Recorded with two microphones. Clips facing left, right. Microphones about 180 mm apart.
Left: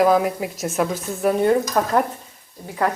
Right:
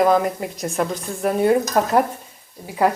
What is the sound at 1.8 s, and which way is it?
Stir, 20° right (ahead or behind).